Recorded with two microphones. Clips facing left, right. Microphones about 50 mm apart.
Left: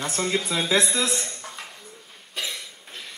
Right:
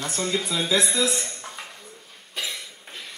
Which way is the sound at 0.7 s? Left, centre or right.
Left.